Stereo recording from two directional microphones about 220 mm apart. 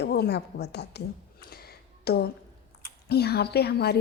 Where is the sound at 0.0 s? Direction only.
50° left (ahead or behind).